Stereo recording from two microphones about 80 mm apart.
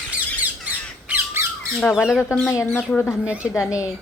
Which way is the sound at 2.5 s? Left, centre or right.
Left.